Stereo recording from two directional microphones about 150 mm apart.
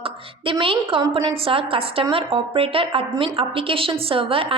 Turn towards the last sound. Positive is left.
turn(degrees=-40)  # may be behind; listen again after turning